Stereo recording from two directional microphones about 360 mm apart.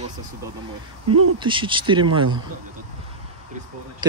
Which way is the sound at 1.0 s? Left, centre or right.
Right.